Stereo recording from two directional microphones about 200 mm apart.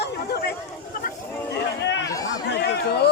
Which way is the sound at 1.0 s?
55° left (ahead or behind).